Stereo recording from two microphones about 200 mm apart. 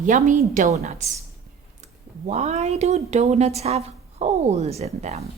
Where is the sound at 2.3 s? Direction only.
35° right (ahead or behind).